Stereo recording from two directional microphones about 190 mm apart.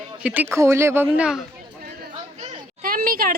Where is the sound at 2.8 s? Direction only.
50° right (ahead or behind).